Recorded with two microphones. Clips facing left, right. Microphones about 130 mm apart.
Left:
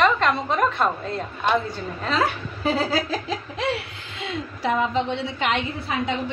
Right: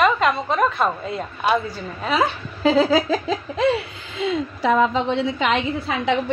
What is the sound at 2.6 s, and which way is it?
Chuckle, 90° right.